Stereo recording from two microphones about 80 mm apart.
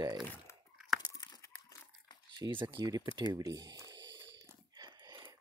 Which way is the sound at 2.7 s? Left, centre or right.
Right.